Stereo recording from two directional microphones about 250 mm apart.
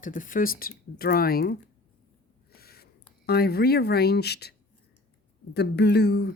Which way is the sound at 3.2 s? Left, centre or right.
Left.